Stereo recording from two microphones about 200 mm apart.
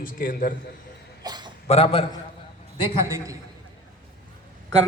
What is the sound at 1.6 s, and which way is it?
A man's voice, 30° left (ahead or behind).